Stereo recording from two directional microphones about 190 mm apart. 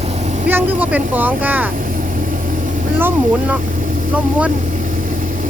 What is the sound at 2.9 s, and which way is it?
Vehicle, 10° right (ahead or behind).